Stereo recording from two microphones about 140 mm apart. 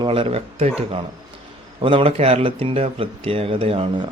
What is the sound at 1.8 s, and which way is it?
Speech, 40° right (ahead or behind).